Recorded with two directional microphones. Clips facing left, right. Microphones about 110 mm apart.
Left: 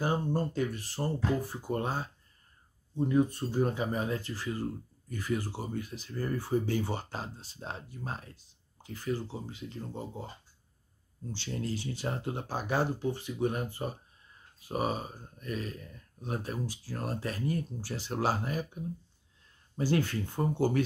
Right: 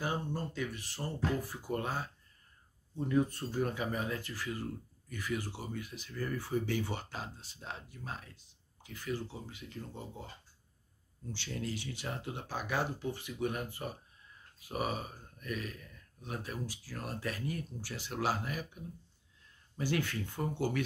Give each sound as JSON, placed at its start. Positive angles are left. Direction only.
{"t": 0.0, "sound": "speech", "side_deg": 40}